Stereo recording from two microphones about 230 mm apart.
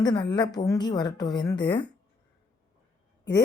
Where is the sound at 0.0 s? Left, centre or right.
Centre.